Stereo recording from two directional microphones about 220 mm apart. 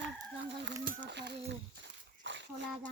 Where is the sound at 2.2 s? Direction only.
55° right (ahead or behind).